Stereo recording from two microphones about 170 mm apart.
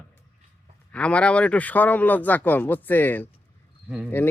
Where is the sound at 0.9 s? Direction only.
5° left (ahead or behind).